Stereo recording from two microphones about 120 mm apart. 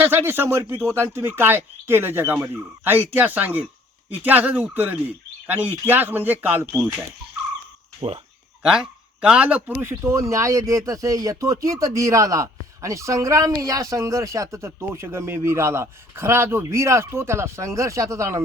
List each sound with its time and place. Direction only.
0.0 s speech: 20° right (ahead or behind)
9.2 s speech: 10° right (ahead or behind)